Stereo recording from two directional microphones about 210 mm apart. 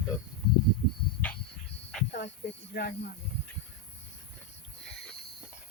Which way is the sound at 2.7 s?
50° left (ahead or behind).